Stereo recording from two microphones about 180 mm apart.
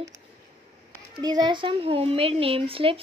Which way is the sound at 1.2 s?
25° right (ahead or behind).